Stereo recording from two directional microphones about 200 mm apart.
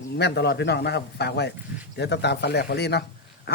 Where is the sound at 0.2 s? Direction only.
55° left (ahead or behind).